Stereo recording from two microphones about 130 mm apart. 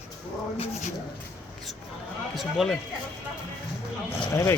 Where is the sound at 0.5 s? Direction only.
50° left (ahead or behind).